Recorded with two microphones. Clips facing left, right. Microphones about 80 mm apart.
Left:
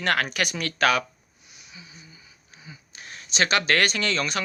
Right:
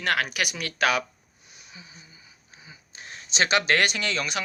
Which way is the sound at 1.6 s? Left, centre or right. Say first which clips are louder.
Left 1 dB; right.